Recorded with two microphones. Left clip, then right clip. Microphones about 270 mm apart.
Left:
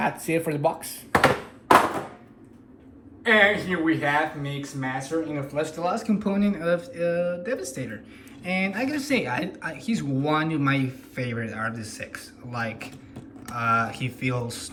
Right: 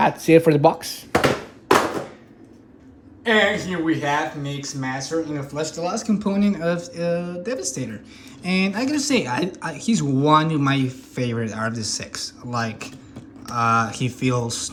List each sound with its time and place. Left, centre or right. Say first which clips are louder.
0.0 s speech: right 10 dB; right
3.2 s speech: even; centre